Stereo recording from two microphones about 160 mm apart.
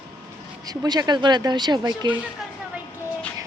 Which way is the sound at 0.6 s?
25° right (ahead or behind).